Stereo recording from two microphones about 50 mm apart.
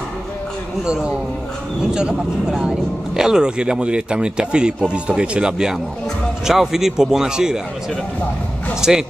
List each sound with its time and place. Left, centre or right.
0.8 s a man's voice: centre
8.8 s a man's voice: centre